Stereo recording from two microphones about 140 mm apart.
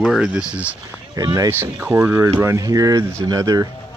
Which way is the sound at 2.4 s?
25° right (ahead or behind).